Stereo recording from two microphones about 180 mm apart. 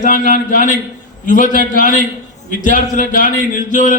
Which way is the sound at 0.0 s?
50° left (ahead or behind).